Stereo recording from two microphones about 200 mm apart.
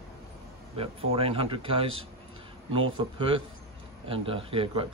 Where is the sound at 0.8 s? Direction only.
30° right (ahead or behind).